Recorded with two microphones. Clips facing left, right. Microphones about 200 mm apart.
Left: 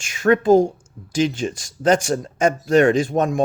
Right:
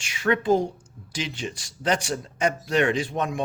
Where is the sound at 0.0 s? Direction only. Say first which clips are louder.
Left 7 dB; 45° left (ahead or behind).